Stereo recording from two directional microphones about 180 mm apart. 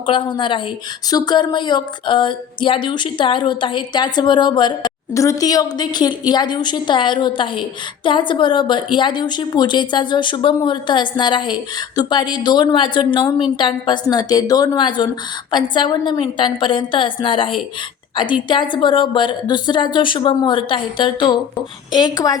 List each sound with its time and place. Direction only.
0.0 s a woman's voice: 30° left (ahead or behind)